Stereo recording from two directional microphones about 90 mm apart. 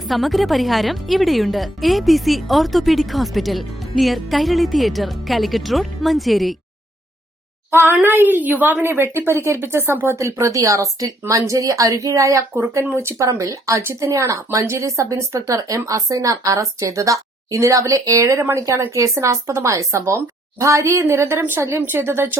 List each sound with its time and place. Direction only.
0.1 s a woman's voice: centre (ahead or behind)
7.7 s a woman's voice: 25° right (ahead or behind)
12.8 s speech: 25° right (ahead or behind)